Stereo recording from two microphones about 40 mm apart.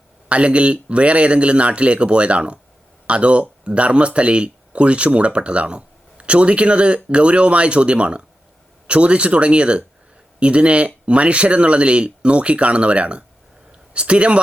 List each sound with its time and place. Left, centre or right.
0.3 s speech: right